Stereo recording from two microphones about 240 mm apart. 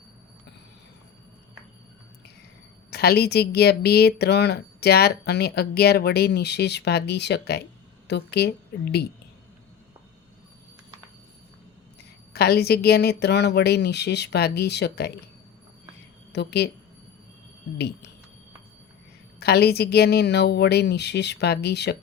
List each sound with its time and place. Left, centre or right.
2.9 s speech: left
12.3 s speech: left
16.3 s speech: left
19.4 s speech: left